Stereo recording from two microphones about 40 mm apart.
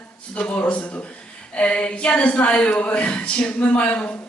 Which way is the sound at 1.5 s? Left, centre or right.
Left.